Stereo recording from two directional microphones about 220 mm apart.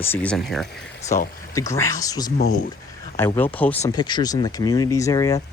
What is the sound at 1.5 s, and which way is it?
Speech, 15° left (ahead or behind).